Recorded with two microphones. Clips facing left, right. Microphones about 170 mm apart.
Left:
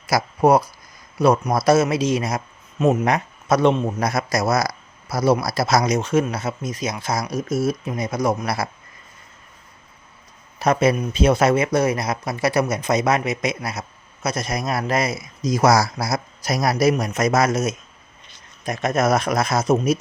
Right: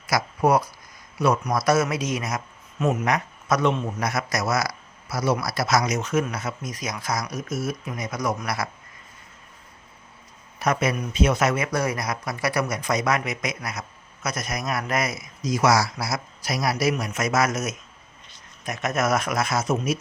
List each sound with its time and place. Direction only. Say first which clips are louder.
0.1 s a man's voice: left 4 dB; 30° left (ahead or behind)
10.6 s a man's voice: left 6 dB; 30° left (ahead or behind)